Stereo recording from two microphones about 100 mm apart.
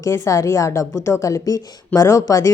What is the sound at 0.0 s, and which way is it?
Speech, 30° left (ahead or behind).